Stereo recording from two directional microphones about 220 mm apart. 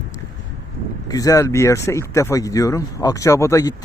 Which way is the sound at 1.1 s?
15° left (ahead or behind).